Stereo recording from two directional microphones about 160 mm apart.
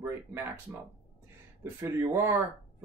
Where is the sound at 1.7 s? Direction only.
15° right (ahead or behind).